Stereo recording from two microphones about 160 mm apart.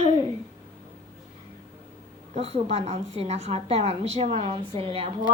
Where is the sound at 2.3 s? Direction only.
40° right (ahead or behind).